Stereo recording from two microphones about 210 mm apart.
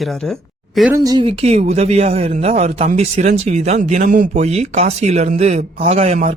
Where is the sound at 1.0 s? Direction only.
20° right (ahead or behind).